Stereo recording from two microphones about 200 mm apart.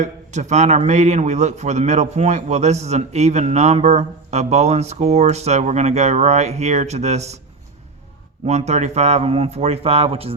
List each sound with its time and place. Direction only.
0.0 s a man's voice: 35° right (ahead or behind)
8.4 s a man's voice: 35° right (ahead or behind)